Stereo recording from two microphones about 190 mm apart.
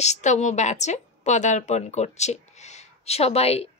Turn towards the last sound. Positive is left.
turn(degrees=35)  # may be behind; listen again after turning